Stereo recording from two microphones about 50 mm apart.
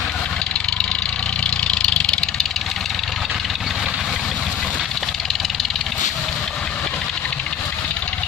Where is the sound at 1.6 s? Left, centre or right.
Centre.